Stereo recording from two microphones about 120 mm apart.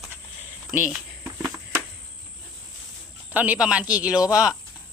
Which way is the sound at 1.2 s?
15° right (ahead or behind).